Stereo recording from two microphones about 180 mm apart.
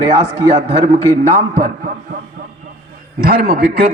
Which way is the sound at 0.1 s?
35° right (ahead or behind).